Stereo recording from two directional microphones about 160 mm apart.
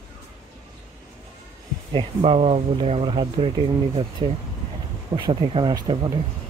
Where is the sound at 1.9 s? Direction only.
35° right (ahead or behind).